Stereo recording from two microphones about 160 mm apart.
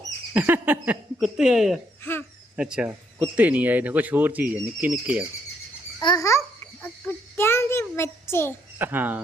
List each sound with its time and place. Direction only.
0.3 s speech: 10° right (ahead or behind)
6.0 s a child's voice: 25° left (ahead or behind)
8.8 s speech: 10° right (ahead or behind)